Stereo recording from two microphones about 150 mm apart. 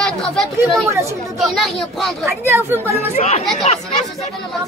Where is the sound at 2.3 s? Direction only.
15° right (ahead or behind).